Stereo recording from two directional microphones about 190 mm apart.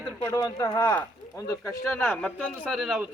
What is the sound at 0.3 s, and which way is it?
Speech, 15° left (ahead or behind).